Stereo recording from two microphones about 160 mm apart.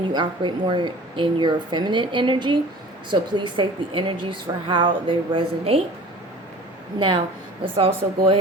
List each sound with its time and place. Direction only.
0.1 s a woman's voice: 30° right (ahead or behind)
7.6 s a woman's voice: 35° right (ahead or behind)